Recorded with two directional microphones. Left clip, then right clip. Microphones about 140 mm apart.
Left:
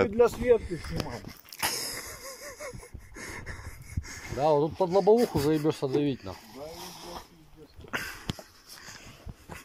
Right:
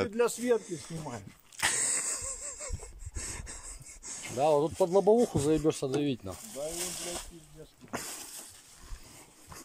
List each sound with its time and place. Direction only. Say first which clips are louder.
0.0 s speech: left 6 dB; centre (ahead or behind)
0.7 s speech: left 4 dB; 15° right (ahead or behind)
1.6 s wheeze: right 1 dB; centre (ahead or behind); by 6.3 s 20° right (ahead or behind)